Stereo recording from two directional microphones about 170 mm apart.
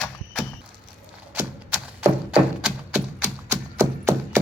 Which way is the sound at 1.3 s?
10° right (ahead or behind).